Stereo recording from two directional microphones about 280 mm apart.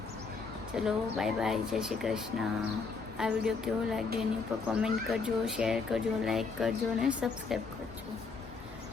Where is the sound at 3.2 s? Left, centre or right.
Centre.